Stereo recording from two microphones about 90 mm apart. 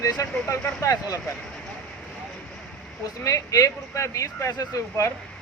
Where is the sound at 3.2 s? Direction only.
40° left (ahead or behind).